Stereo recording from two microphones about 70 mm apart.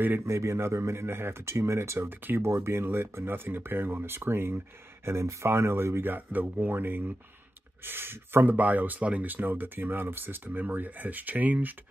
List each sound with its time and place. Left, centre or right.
0.3 s speech: right